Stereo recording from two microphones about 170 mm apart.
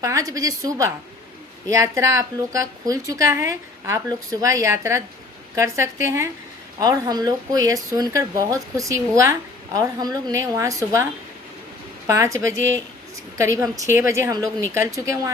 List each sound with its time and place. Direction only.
0.0 s speech: 20° right (ahead or behind)